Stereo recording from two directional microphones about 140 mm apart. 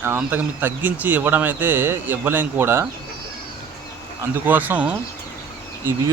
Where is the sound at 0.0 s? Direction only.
15° right (ahead or behind).